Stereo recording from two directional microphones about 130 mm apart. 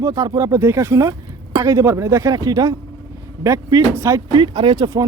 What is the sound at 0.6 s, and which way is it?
Speech, 15° right (ahead or behind).